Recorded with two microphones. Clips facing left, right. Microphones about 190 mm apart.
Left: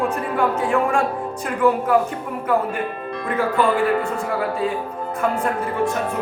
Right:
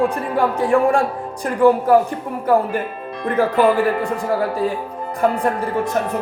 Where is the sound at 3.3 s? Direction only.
35° right (ahead or behind).